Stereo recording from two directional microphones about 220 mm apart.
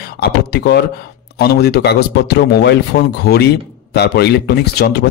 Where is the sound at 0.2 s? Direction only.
45° left (ahead or behind).